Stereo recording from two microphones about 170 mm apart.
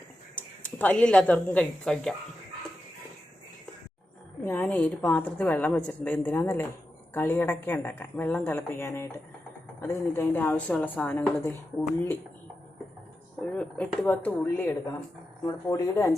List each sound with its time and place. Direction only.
0.8 s speech: 10° left (ahead or behind)
4.4 s a woman's voice: 10° left (ahead or behind)
13.4 s a woman's voice: 5° left (ahead or behind)